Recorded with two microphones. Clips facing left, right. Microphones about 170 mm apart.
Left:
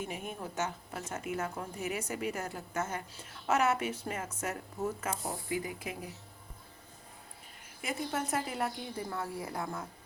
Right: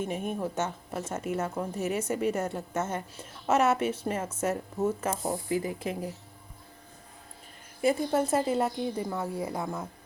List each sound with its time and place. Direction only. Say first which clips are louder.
0.9 s a woman's voice: right 6 dB; 25° right (ahead or behind)
5.2 s speech: right 6 dB; 35° right (ahead or behind)
7.8 s a woman's voice: right 10 dB; 30° right (ahead or behind)